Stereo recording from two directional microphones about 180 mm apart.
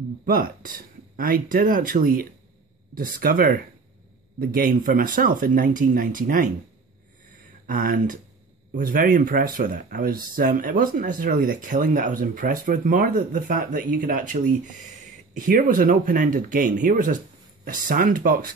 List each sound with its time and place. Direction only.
0.2 s speech: 50° right (ahead or behind)
7.6 s speech: 50° right (ahead or behind)